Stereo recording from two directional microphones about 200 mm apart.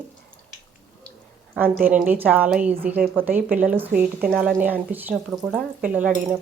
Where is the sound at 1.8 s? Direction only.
10° right (ahead or behind).